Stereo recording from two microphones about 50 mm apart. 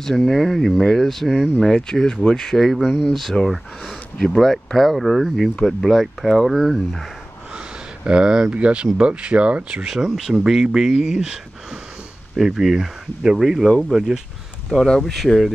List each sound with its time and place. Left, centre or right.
0.0 s speech: centre
2.8 s speech: centre
3.1 s speech: centre
7.5 s a sound: centre
8.5 s speech: right
9.8 s speech: centre
14.9 s speech: centre